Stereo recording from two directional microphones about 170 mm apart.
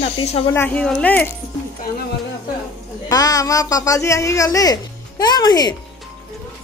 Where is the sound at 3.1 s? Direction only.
20° left (ahead or behind).